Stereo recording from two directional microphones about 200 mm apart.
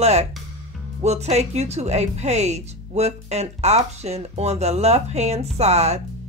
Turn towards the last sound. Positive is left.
turn(degrees=-35)  # may be behind; listen again after turning